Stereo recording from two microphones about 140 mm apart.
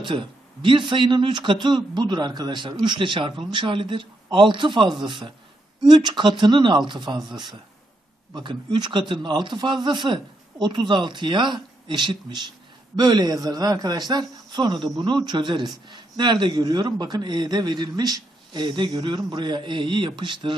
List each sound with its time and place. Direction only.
0.0 s a man's voice: 35° right (ahead or behind)